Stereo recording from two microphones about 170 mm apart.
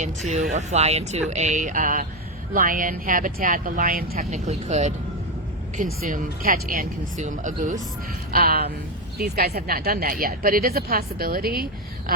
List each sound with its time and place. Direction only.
0.5 s speech: 40° right (ahead or behind); by 4.3 s 55° right (ahead or behind)
4.3 s speech: 45° right (ahead or behind)
8.3 s a woman's voice: 65° right (ahead or behind)